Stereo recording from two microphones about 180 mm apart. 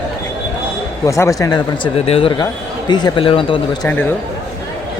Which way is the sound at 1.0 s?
15° left (ahead or behind).